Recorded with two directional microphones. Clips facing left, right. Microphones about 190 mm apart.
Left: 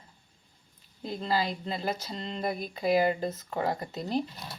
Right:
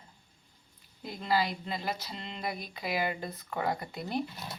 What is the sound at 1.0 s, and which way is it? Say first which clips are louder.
Speech: left 1 dB; 30° left (ahead or behind).